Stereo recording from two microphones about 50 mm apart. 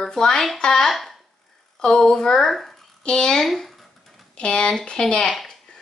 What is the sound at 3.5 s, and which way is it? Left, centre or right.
Speech, centre.